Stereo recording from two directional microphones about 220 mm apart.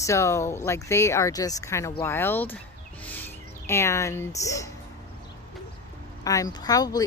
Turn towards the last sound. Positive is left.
turn(degrees=15)  # may be behind; listen again after turning